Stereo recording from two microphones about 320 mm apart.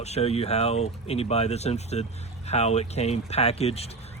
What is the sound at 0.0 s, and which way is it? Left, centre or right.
Speech, centre.